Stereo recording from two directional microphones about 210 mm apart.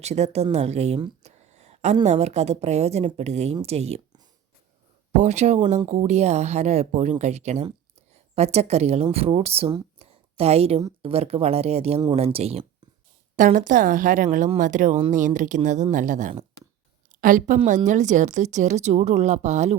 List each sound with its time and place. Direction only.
0.0 s a woman's voice: 30° right (ahead or behind)